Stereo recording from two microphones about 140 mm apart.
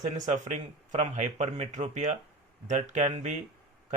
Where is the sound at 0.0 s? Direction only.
60° right (ahead or behind).